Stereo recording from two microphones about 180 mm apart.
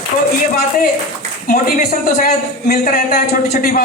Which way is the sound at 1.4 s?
55° left (ahead or behind).